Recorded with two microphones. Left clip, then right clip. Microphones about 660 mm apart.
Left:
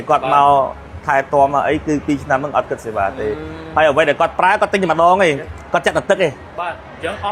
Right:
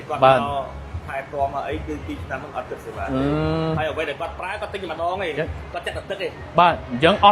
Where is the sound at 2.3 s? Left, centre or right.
Left.